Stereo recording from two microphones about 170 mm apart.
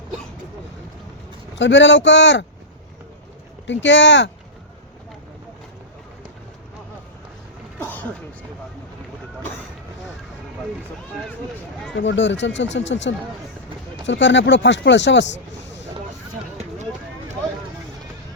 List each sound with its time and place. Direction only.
1.5 s speech: 90° left
3.7 s speech: 90° left
7.8 s music: 10° left (ahead or behind)
11.9 s speech: 90° left